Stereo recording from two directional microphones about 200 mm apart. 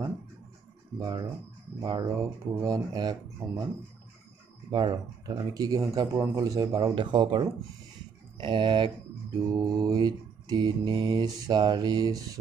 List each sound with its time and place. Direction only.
0.9 s speech: 20° right (ahead or behind)
4.6 s speech: 20° right (ahead or behind)